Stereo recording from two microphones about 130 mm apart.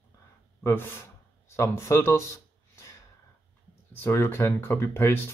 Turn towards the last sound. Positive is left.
turn(degrees=20)  # may be behind; listen again after turning